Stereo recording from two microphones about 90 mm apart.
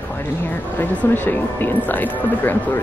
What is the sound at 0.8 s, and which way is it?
Speech, 20° left (ahead or behind).